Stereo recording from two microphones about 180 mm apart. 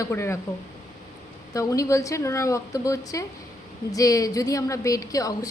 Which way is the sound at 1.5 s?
15° left (ahead or behind).